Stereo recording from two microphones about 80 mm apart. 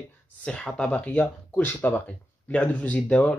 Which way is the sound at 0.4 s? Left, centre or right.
Centre.